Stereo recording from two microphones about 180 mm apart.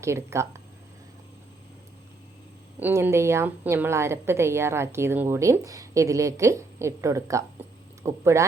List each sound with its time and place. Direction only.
0.0 s a woman's voice: 15° right (ahead or behind)
2.7 s a woman's voice: 10° right (ahead or behind)